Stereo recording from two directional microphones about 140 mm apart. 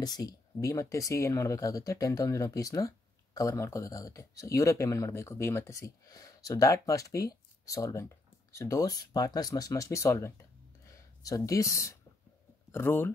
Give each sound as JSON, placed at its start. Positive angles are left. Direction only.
{"t": 0.0, "sound": "speech", "side_deg": 25}